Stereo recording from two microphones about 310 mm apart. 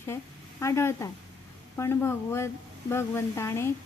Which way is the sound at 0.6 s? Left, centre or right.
Centre.